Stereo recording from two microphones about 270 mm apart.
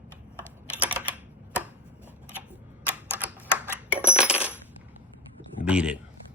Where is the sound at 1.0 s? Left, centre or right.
Centre.